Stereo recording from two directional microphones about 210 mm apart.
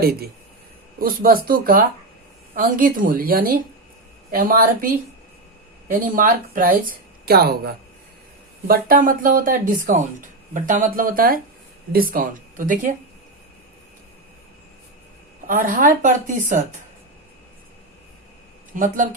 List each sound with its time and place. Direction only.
0.0 s speech: 50° right (ahead or behind)
5.9 s speech: 40° right (ahead or behind)
15.4 s speech: 40° right (ahead or behind)